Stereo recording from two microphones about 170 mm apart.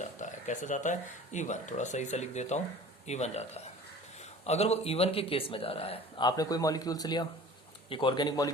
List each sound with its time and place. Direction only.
0.0 s speech: 45° left (ahead or behind); by 8.4 s 25° left (ahead or behind)